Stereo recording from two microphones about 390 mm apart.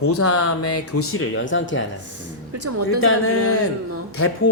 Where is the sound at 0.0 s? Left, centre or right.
Left.